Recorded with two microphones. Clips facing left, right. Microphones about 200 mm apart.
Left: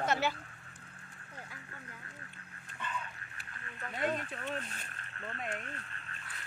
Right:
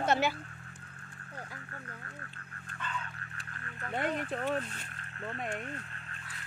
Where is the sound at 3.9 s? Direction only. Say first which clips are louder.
Right 2 dB; 55° right (ahead or behind).